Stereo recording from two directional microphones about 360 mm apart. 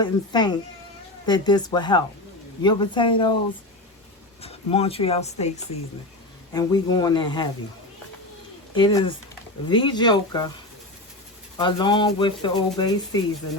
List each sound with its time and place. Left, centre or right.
0.0 s speech: centre
4.4 s speech: centre
8.7 s speech: centre
11.5 s speech: centre